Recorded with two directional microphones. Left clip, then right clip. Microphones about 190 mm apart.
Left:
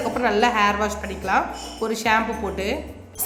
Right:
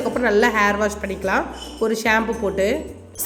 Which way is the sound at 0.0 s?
15° right (ahead or behind).